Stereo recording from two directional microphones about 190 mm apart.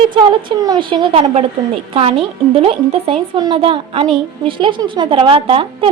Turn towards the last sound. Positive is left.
turn(degrees=-30)  # may be behind; listen again after turning